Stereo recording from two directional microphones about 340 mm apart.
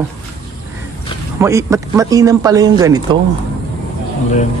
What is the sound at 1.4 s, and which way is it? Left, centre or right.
Speech, centre.